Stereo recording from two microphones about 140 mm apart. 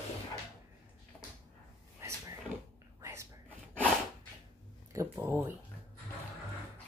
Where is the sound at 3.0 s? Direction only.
20° right (ahead or behind).